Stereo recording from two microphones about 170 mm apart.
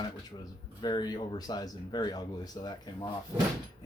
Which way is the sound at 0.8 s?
25° left (ahead or behind).